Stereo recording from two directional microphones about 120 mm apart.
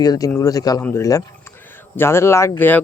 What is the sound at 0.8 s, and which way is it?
Speech, 15° left (ahead or behind).